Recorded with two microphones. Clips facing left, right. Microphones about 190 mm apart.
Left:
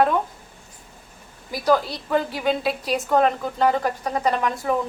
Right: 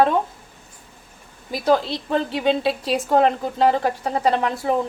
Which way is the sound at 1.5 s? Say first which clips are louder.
Right 1 dB; 25° right (ahead or behind).